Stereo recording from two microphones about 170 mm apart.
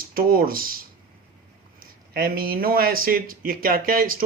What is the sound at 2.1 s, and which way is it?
Speech, 60° right (ahead or behind).